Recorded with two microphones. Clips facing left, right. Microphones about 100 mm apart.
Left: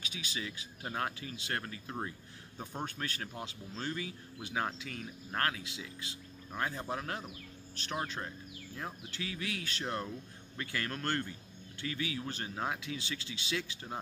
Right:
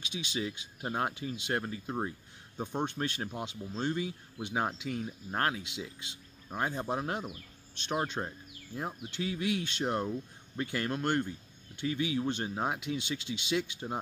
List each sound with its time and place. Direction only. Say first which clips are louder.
0.3 s speech: right 7 dB; 25° right (ahead or behind)